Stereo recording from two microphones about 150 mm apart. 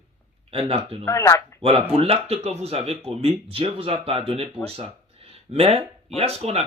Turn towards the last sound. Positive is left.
turn(degrees=-45)  # may be behind; listen again after turning